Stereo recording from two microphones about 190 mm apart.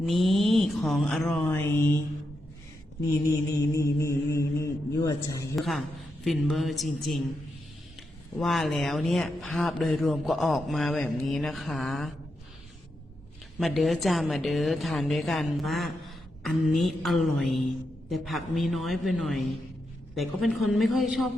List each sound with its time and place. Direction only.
0.0 s a sound: centre (ahead or behind)
3.7 s a man's voice: 15° left (ahead or behind)
5.5 s a woman's voice: centre (ahead or behind)
8.4 s a woman's voice: centre (ahead or behind)
13.6 s a woman's voice: centre (ahead or behind)